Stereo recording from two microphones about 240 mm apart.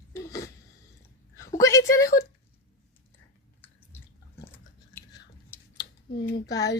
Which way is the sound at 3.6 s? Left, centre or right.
Centre.